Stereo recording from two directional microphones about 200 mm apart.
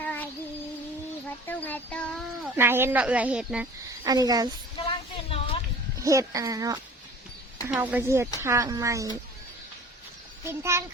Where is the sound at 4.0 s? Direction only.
20° right (ahead or behind).